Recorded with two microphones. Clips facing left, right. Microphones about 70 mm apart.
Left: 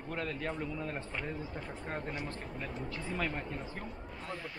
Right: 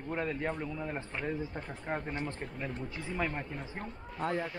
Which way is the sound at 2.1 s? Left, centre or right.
Right.